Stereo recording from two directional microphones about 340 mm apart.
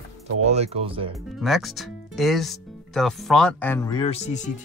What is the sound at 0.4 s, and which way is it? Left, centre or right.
Speech, centre.